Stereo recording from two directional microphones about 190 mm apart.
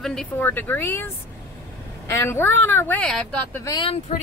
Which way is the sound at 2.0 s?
15° left (ahead or behind).